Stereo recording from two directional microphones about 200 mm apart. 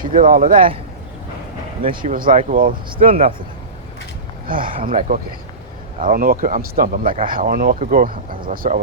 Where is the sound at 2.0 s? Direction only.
45° right (ahead or behind).